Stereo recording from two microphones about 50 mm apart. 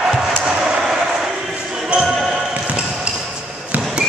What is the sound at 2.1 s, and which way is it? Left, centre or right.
Basketball bounce, centre.